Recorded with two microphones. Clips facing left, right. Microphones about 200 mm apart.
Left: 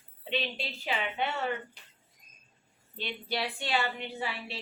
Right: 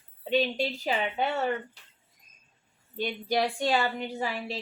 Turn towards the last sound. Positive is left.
turn(degrees=-40)  # may be behind; listen again after turning